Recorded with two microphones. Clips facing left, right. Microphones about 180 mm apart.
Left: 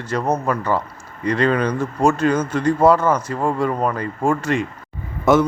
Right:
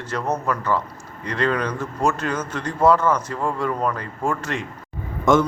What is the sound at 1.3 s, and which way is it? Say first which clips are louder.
A man's voice: left 5 dB; 15° left (ahead or behind).